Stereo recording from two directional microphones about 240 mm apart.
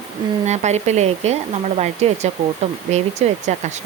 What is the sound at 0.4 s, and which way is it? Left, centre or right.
Speech, right.